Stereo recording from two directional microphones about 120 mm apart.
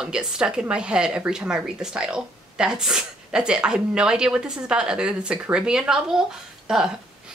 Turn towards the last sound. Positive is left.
turn(degrees=-5)  # may be behind; listen again after turning